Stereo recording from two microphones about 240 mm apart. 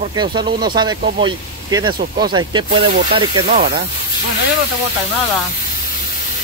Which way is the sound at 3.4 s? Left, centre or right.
Right.